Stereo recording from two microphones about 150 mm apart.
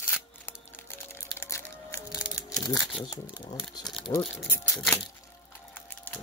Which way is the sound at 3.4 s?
30° left (ahead or behind).